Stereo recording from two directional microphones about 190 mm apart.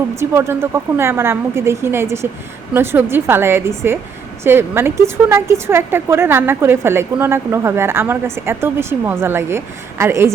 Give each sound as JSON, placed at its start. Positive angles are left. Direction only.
{"t": 0.2, "sound": "a woman's voice", "side_deg": -15}